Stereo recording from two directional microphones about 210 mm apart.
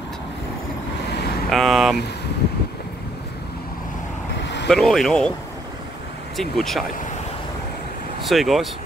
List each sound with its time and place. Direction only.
1.5 s vehicle: centre (ahead or behind)
4.4 s vehicle: 55° left (ahead or behind)
4.6 s speech: centre (ahead or behind)
6.3 s speech: centre (ahead or behind)
8.3 s speech: centre (ahead or behind)